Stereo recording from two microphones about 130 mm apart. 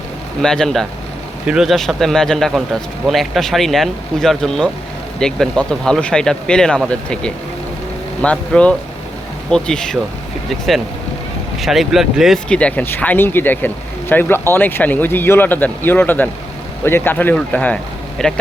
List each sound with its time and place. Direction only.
0.4 s speech: 5° left (ahead or behind)
11.5 s speech: centre (ahead or behind)
12.5 s speech: 10° left (ahead or behind)